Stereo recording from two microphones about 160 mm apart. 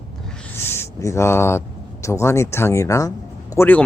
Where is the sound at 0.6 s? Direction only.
15° left (ahead or behind).